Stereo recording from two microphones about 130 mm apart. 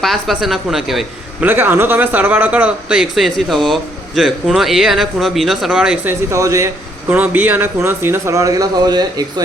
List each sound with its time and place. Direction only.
0.0 s speech: centre (ahead or behind)
1.5 s speech: 15° right (ahead or behind)
6.3 s speech: 25° right (ahead or behind)
7.1 s speech: 15° right (ahead or behind); by 9.2 s 30° right (ahead or behind)